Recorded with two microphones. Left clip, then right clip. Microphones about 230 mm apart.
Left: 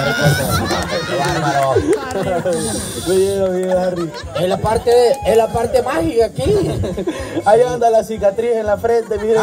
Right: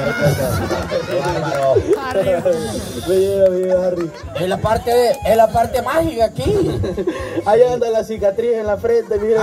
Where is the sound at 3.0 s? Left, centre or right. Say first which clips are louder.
Right 2 dB; left.